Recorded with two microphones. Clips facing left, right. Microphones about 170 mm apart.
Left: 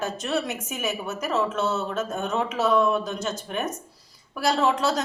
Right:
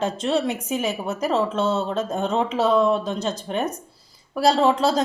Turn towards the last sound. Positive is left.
turn(degrees=-30)  # may be behind; listen again after turning